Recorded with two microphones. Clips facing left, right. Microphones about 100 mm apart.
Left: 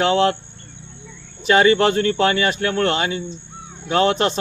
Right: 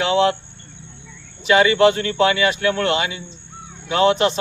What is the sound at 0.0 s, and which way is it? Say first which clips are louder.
Cricket: even; 45° left (ahead or behind).